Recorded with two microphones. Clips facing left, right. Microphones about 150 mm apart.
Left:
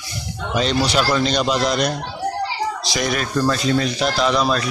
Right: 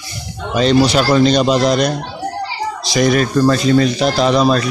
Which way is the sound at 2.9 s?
40° right (ahead or behind).